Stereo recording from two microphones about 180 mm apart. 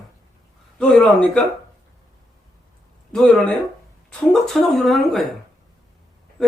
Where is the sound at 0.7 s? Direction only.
5° left (ahead or behind).